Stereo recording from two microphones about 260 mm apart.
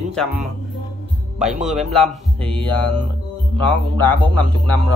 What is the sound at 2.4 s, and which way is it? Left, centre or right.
Music, right.